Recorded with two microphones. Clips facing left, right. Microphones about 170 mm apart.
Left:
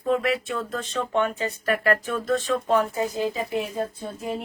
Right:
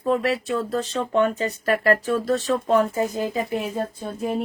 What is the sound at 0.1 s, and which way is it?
Speech, 35° right (ahead or behind).